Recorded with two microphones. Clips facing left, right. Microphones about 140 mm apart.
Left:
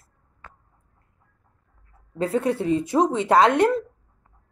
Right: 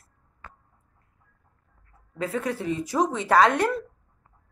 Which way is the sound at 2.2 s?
30° left (ahead or behind).